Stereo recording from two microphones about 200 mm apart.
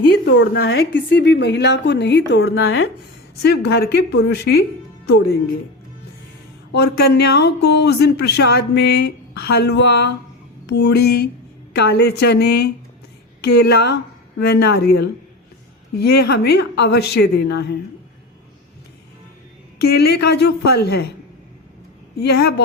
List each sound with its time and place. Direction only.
0.3 s speech: 55° left (ahead or behind); by 2.9 s 75° left (ahead or behind)
3.4 s a woman's voice: 55° left (ahead or behind)
6.7 s a woman's voice: 55° left (ahead or behind)
19.8 s a woman's voice: 50° left (ahead or behind)
22.1 s speech: 55° left (ahead or behind)